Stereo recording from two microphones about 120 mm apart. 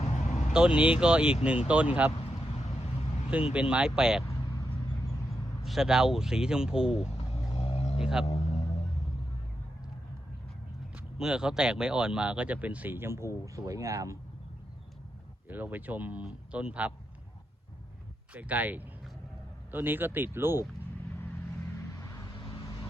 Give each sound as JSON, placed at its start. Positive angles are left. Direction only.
{"t": 0.0, "sound": "vehicle", "side_deg": 80}
{"t": 0.5, "sound": "speech", "side_deg": -5}
{"t": 2.2, "sound": "vehicle", "side_deg": 60}
{"t": 3.5, "sound": "speech", "side_deg": -10}
{"t": 4.3, "sound": "vehicle", "side_deg": 30}
{"t": 5.6, "sound": "speech", "side_deg": -5}
{"t": 7.5, "sound": "vehicle", "side_deg": 60}
{"t": 7.9, "sound": "speech", "side_deg": -5}
{"t": 10.9, "sound": "speech", "side_deg": -5}
{"t": 15.4, "sound": "speech", "side_deg": -15}
{"t": 18.3, "sound": "speech", "side_deg": -15}
{"t": 21.9, "sound": "vehicle", "side_deg": 25}
{"t": 22.4, "sound": "vehicle", "side_deg": 40}